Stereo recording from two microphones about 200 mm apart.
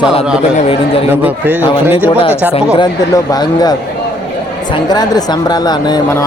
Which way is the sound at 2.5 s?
20° left (ahead or behind).